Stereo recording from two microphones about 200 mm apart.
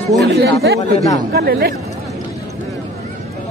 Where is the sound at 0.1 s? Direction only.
55° right (ahead or behind).